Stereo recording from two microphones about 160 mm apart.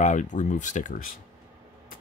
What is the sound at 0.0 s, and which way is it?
Speech, 50° left (ahead or behind).